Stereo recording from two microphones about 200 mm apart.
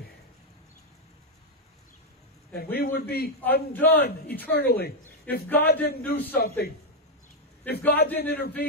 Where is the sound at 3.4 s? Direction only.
10° left (ahead or behind).